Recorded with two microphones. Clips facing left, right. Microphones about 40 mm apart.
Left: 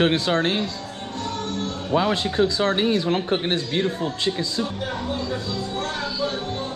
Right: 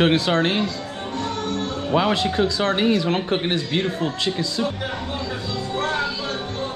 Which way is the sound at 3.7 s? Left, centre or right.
Right.